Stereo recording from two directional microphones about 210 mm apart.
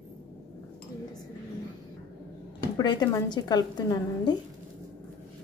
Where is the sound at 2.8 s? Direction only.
20° left (ahead or behind).